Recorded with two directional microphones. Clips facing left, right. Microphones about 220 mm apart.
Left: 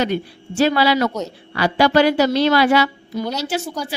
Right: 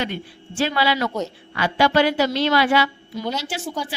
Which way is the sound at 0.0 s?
40° left (ahead or behind).